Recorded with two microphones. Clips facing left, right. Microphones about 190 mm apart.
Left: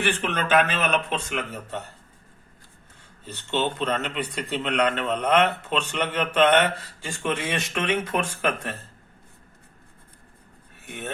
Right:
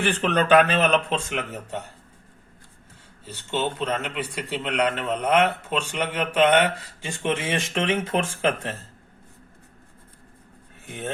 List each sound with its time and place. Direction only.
0.1 s speech: 35° right (ahead or behind); by 1.8 s 20° right (ahead or behind)
3.2 s speech: 10° right (ahead or behind); by 8.7 s 25° right (ahead or behind)
10.8 s speech: 30° right (ahead or behind)